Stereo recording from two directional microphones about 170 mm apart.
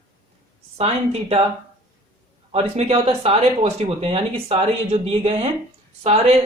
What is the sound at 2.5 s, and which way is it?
Speech, 35° right (ahead or behind).